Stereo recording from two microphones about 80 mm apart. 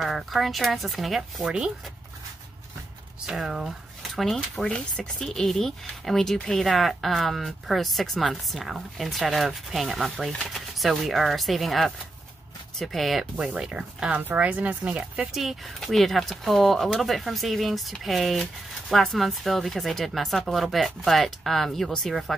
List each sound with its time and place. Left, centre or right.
0.0 s speech: centre
3.3 s speech: centre
15.3 s speech: centre